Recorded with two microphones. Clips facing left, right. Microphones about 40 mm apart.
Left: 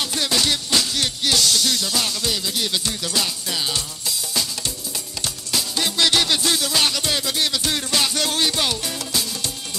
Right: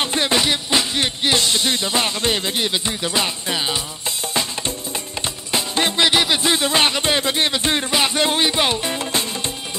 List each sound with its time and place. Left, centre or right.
0.0 s music: right
4.3 s drum: right
5.2 s music: right